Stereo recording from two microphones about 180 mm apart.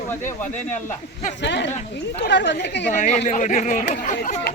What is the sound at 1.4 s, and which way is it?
Speech, 75° left (ahead or behind).